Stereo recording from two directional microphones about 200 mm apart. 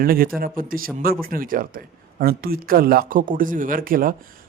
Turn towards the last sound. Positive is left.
turn(degrees=-45)  # may be behind; listen again after turning